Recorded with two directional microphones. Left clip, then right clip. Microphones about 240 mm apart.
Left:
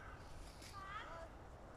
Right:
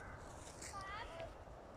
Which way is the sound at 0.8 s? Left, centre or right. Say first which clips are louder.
Even; right.